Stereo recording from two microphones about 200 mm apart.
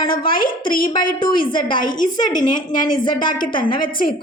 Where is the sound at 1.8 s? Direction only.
45° left (ahead or behind).